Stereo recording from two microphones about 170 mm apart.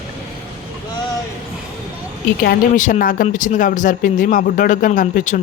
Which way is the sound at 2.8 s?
50° left (ahead or behind).